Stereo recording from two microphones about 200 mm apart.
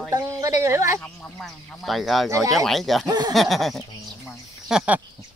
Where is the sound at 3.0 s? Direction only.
20° right (ahead or behind).